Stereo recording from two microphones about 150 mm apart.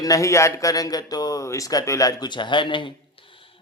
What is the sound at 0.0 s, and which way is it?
A man's voice, 20° left (ahead or behind).